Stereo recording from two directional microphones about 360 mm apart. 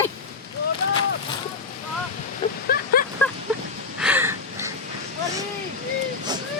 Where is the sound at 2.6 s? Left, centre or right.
Left.